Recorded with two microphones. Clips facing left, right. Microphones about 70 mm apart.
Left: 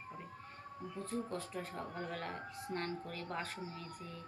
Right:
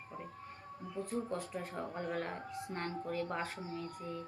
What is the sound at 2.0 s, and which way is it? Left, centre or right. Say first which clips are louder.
A woman's voice: right 4 dB; centre.